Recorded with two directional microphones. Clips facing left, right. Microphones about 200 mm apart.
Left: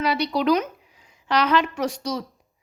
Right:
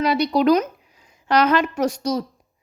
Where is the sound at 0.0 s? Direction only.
45° right (ahead or behind).